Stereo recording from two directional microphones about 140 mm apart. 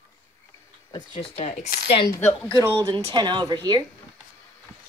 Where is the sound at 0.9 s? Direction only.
35° left (ahead or behind).